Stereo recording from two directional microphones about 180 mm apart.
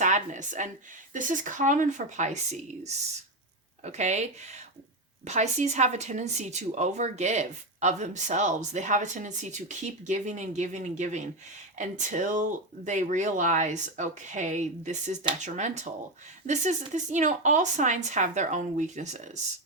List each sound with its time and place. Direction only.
0.0 s a woman's voice: 45° right (ahead or behind)